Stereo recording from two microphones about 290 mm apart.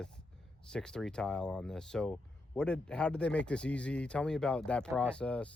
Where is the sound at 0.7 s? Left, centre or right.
Centre.